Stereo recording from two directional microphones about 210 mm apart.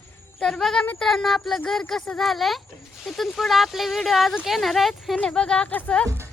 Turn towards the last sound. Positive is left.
turn(degrees=5)  # may be behind; listen again after turning